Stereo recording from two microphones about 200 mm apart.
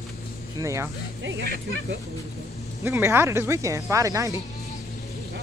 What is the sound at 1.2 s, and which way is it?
Speech, 60° right (ahead or behind).